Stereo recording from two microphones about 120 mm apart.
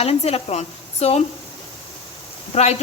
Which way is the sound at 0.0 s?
55° left (ahead or behind).